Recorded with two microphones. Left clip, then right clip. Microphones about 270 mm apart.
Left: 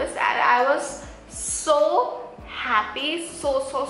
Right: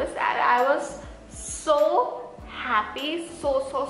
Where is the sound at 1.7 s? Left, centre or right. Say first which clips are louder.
Left 1 dB; right.